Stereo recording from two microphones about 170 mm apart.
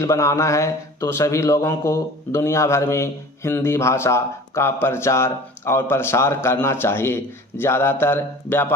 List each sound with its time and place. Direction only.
0.0 s speech: 15° left (ahead or behind)